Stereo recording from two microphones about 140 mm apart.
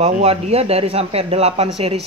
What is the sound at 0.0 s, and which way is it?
A woman's voice, 45° right (ahead or behind).